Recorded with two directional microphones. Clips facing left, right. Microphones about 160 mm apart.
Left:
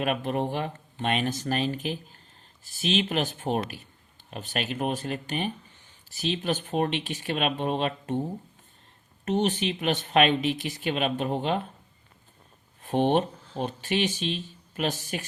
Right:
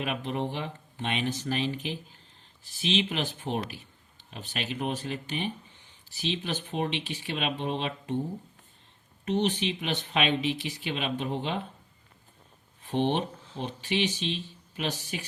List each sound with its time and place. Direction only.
0.0 s speech: 50° left (ahead or behind)
9.2 s speech: 50° left (ahead or behind)
12.8 s speech: 50° left (ahead or behind)